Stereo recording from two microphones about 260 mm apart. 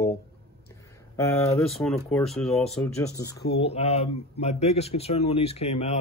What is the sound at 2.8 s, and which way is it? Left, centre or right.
Speech, centre.